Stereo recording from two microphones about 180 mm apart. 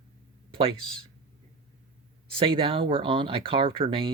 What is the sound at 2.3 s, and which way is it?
Speech, 30° right (ahead or behind).